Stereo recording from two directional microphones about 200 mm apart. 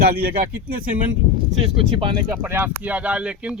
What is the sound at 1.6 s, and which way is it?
Speech, 25° right (ahead or behind).